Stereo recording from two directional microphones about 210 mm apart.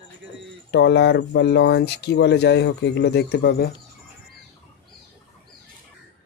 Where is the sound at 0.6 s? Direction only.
55° left (ahead or behind).